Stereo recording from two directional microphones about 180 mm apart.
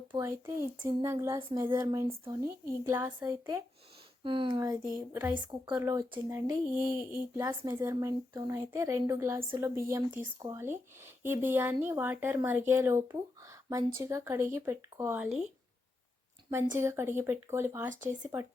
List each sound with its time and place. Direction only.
0.2 s speech: 15° right (ahead or behind)
2.4 s speech: 15° right (ahead or behind)
4.2 s speech: 30° right (ahead or behind)
5.1 s speech: 10° right (ahead or behind)
16.5 s speech: 15° right (ahead or behind)
17.9 s speech: 45° right (ahead or behind)
18.2 s speech: 20° right (ahead or behind)